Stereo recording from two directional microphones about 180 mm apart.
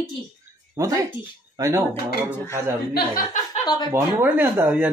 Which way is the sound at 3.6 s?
25° left (ahead or behind).